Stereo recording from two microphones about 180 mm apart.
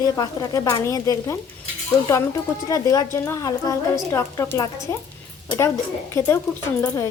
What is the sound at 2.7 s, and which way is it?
Speech, 20° left (ahead or behind).